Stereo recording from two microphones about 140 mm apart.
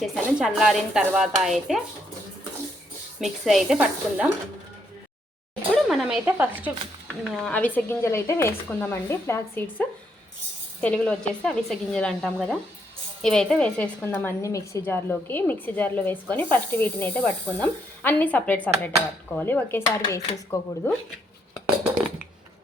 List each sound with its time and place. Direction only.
0.0 s speech: 5° right (ahead or behind)
3.2 s speech: centre (ahead or behind)
5.7 s speech: centre (ahead or behind)
7.3 s a woman's voice: 5° left (ahead or behind)